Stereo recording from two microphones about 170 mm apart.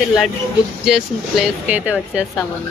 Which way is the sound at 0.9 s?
5° right (ahead or behind).